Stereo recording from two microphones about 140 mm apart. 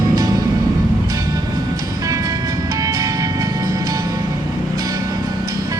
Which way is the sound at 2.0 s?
25° right (ahead or behind).